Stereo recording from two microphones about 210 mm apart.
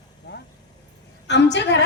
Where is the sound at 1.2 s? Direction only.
55° left (ahead or behind).